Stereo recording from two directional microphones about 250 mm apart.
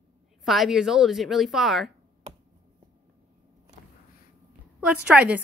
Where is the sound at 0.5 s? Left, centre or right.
Centre.